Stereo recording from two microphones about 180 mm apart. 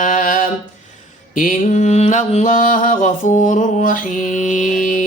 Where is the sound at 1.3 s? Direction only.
45° left (ahead or behind).